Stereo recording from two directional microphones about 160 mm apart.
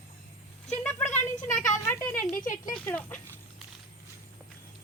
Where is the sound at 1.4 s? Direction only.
50° left (ahead or behind).